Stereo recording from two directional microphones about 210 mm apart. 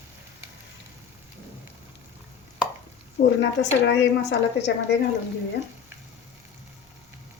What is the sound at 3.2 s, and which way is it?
A woman's voice, 55° left (ahead or behind).